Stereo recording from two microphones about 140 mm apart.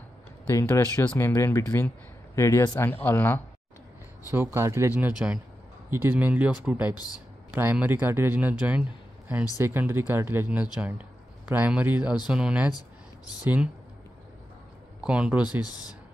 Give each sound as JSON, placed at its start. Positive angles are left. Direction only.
{"t": 0.5, "sound": "speech", "side_deg": 20}
{"t": 4.3, "sound": "speech", "side_deg": -15}
{"t": 15.0, "sound": "speech", "side_deg": -5}
{"t": 15.6, "sound": "speech", "side_deg": 30}